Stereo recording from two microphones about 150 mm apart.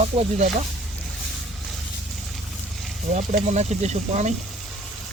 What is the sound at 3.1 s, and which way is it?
Speech, 50° right (ahead or behind).